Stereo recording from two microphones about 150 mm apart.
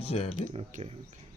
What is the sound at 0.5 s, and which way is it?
Speech, 45° right (ahead or behind).